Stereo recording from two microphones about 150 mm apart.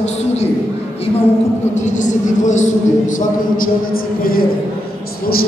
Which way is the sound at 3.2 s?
70° left (ahead or behind).